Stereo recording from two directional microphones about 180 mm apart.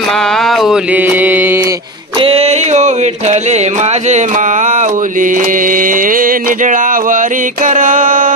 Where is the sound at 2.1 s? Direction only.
30° right (ahead or behind).